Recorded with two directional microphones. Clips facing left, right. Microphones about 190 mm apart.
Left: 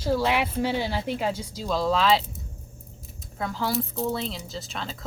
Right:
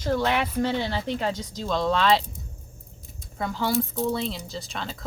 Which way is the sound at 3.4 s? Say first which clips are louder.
Right 2 dB; centre (ahead or behind).